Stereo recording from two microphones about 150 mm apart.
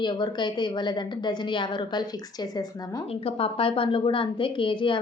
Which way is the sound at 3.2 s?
40° left (ahead or behind).